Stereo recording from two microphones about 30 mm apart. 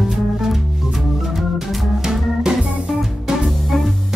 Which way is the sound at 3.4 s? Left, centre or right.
Centre.